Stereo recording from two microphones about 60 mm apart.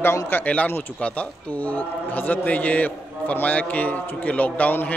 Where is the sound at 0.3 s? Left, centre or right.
Left.